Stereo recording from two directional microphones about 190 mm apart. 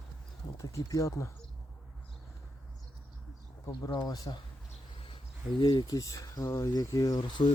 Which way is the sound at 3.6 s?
20° left (ahead or behind).